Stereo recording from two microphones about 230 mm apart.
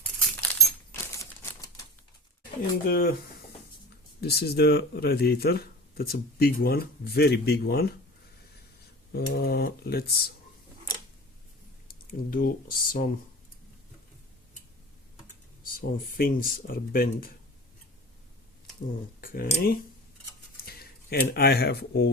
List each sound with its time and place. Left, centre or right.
0.9 s typewriter: centre
2.4 s speech: left
4.2 s speech: left
9.1 s speech: left
11.9 s speech: left
15.7 s speech: left
19.2 s speech: left